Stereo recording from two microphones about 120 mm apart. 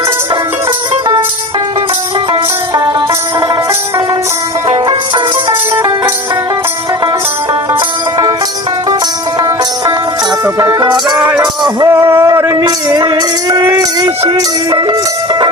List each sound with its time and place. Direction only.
3.4 s music: 30° right (ahead or behind)
4.9 s music: 40° right (ahead or behind)
10.4 s music: 25° right (ahead or behind)
11.9 s music: 20° right (ahead or behind)
14.8 s music: 40° right (ahead or behind)